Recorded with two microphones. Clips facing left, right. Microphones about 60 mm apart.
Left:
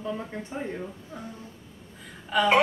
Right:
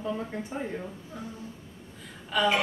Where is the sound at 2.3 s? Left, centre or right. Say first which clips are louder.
Left 2 dB; centre.